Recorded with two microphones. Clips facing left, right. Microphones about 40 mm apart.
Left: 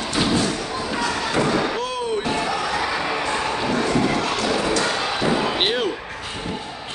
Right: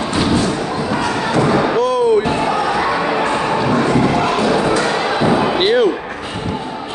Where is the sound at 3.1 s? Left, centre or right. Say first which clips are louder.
Right 7 dB; right.